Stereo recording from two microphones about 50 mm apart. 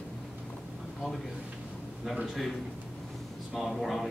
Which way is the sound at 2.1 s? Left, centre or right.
Centre.